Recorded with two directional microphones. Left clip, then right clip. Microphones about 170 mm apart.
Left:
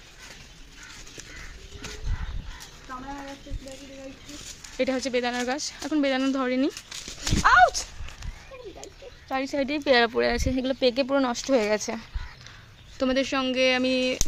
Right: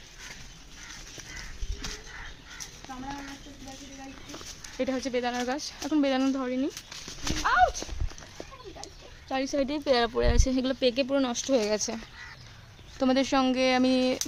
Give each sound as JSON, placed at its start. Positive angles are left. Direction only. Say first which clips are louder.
{"t": 4.8, "sound": "speech", "louder": "left 4 dB", "side_deg": 15}
{"t": 6.4, "sound": "speech", "louder": "left 5 dB", "side_deg": 25}
{"t": 7.4, "sound": "horse", "louder": "left 6 dB", "side_deg": 20}
{"t": 9.3, "sound": "speech", "louder": "left 2 dB", "side_deg": -5}
{"t": 10.3, "sound": "speech", "louder": "left 2 dB", "side_deg": -10}
{"t": 10.8, "sound": "speech", "louder": "left 4 dB", "side_deg": 5}
{"t": 13.0, "sound": "speech", "louder": "even", "side_deg": -15}